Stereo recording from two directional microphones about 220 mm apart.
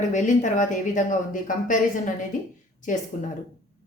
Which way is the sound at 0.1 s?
35° left (ahead or behind).